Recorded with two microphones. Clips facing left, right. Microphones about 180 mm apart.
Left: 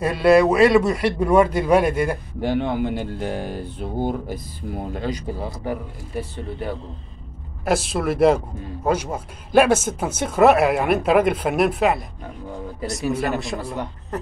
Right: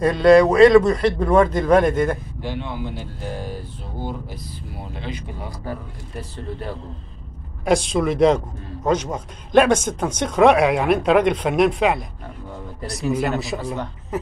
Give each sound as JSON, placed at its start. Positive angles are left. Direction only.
{"t": 0.0, "sound": "speech", "side_deg": 5}
{"t": 2.4, "sound": "speech", "side_deg": 50}
{"t": 4.0, "sound": "speech", "side_deg": 50}
{"t": 7.6, "sound": "speech", "side_deg": 5}